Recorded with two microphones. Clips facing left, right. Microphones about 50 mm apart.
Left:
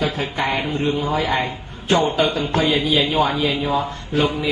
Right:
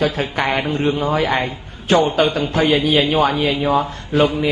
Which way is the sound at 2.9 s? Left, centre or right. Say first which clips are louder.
Right 3 dB; right.